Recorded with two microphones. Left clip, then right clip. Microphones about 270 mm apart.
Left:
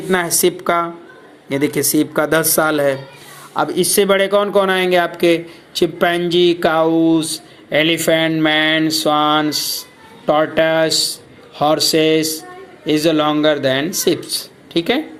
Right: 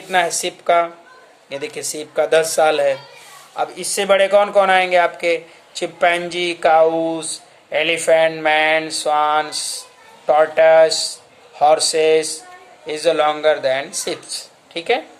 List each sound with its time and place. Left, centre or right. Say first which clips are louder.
0.1 s a man's voice: left 2 dB; centre